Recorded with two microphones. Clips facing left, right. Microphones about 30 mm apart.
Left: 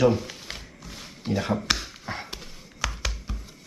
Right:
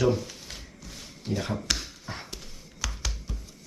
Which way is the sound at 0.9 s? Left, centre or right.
Left.